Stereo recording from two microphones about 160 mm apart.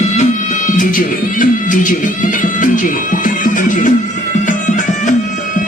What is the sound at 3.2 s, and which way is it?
Music, 55° left (ahead or behind).